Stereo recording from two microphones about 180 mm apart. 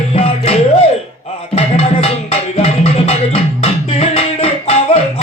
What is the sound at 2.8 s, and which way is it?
Beatboxing, 35° left (ahead or behind).